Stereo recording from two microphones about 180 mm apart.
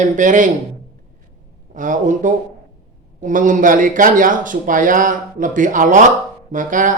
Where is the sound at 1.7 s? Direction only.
45° right (ahead or behind).